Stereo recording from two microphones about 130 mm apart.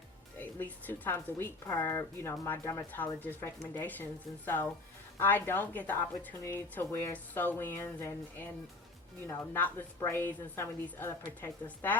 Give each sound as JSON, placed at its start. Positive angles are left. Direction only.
{"t": 0.3, "sound": "a woman's voice", "side_deg": 15}